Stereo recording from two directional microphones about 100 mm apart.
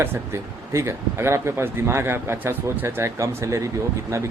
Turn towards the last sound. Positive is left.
turn(degrees=-30)  # may be behind; listen again after turning